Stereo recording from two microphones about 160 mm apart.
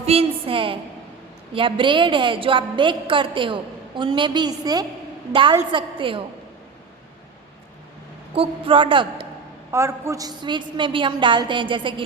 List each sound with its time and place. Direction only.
0.0 s a woman's voice: 40° right (ahead or behind)
8.4 s a woman's voice: 35° right (ahead or behind)
9.7 s a woman's voice: 20° right (ahead or behind)